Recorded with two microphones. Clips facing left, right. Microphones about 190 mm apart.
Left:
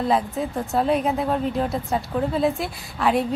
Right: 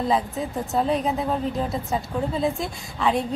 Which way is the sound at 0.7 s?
Centre (ahead or behind).